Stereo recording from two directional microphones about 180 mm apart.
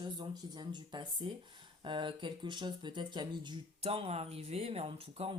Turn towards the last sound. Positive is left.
turn(degrees=-30)  # may be behind; listen again after turning